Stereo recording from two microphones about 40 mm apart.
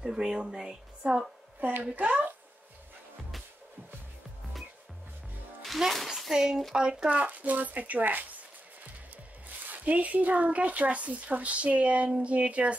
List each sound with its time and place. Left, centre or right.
0.0 s speech: centre
1.0 s a woman's voice: right
1.6 s speech: right
6.0 s speech: centre
6.3 s speech: centre; by 8.3 s right
9.7 s speech: right